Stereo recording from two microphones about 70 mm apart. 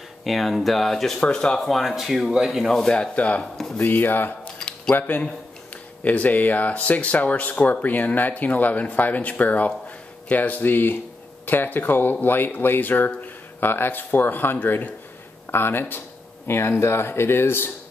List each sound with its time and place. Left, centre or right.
0.2 s speech: centre
1.7 s speech: centre
2.6 s speech: centre
3.5 s speech: centre
3.8 s speech: left
4.6 s a sound: centre
4.9 s speech: left